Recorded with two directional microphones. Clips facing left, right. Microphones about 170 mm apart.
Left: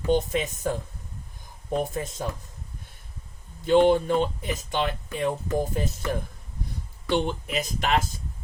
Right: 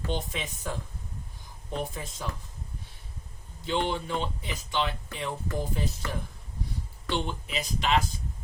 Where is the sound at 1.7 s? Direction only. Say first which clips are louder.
Left 7 dB; 45° left (ahead or behind).